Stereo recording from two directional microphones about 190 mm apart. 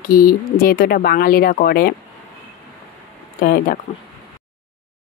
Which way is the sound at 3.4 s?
50° left (ahead or behind).